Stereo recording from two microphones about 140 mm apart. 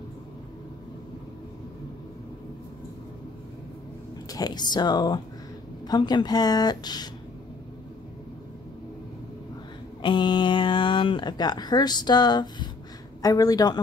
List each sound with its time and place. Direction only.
4.3 s speech: 30° left (ahead or behind)
10.0 s speech: 35° left (ahead or behind)